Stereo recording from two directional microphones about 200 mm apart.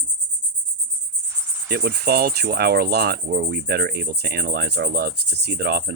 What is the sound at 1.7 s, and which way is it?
Cricket, 50° right (ahead or behind).